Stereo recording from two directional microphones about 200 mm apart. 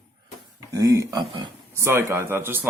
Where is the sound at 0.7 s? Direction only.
15° right (ahead or behind).